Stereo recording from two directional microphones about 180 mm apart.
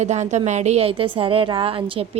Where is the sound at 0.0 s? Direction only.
40° right (ahead or behind).